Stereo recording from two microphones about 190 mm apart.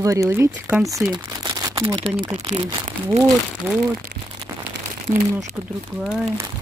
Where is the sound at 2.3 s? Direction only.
25° right (ahead or behind).